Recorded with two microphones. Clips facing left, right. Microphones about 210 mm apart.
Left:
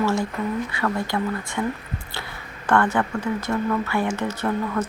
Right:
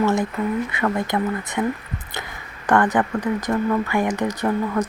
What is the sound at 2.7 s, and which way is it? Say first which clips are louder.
Speech: right 2 dB; 15° right (ahead or behind).